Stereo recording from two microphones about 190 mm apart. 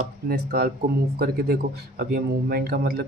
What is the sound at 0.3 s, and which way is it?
A man's voice, 55° right (ahead or behind).